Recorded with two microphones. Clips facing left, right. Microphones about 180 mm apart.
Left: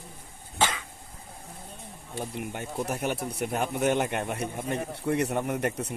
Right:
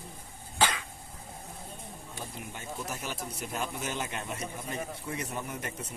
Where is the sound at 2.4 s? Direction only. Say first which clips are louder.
Left 7 dB; 60° left (ahead or behind).